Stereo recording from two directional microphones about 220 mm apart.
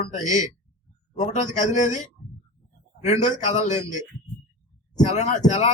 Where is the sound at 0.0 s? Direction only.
35° left (ahead or behind).